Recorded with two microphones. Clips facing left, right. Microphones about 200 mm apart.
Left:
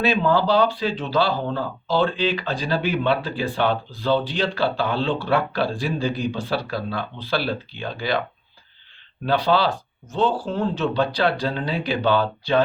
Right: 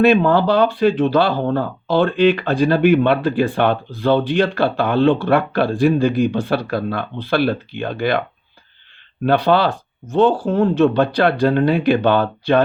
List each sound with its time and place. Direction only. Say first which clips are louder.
0.0 s speech: right 6 dB; 60° right (ahead or behind)
9.2 s speech: right 5 dB; 55° right (ahead or behind)